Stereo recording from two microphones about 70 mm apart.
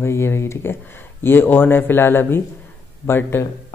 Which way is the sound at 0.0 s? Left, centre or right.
Left.